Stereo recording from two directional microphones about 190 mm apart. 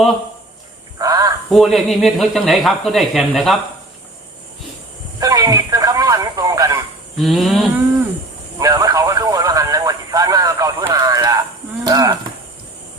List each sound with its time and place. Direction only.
0.9 s fowl: 20° right (ahead or behind)
1.5 s speech: centre (ahead or behind)
5.2 s fowl: 20° right (ahead or behind)
7.2 s speech: centre (ahead or behind)
8.5 s vehicle: 20° right (ahead or behind)
11.9 s a sound: 20° right (ahead or behind)